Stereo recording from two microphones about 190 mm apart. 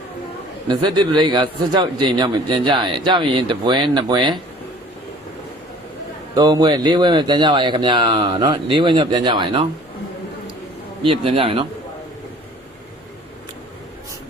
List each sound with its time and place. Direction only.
0.7 s a man's voice: 25° right (ahead or behind)
6.3 s a man's voice: 20° right (ahead or behind)
11.0 s a man's voice: 30° right (ahead or behind)